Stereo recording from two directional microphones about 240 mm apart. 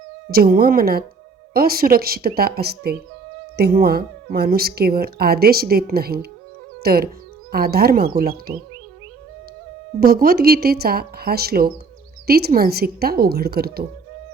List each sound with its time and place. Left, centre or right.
0.3 s speech: right
10.0 s speech: right